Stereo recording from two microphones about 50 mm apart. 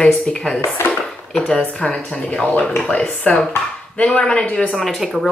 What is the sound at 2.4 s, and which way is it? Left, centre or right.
Speech, left.